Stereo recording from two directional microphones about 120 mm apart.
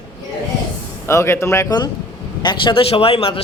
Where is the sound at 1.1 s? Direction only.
20° left (ahead or behind).